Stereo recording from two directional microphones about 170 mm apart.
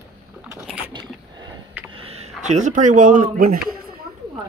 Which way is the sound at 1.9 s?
35° right (ahead or behind).